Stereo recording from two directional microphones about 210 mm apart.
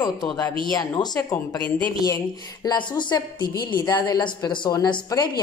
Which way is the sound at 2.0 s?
15° left (ahead or behind).